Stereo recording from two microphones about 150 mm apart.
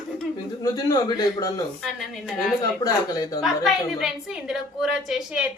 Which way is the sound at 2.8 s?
25° left (ahead or behind).